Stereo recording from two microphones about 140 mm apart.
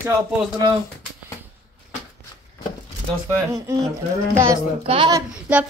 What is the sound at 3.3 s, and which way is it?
Speech, 25° right (ahead or behind).